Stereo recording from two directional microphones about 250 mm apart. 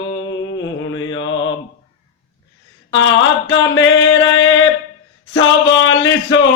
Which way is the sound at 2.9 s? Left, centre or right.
Left.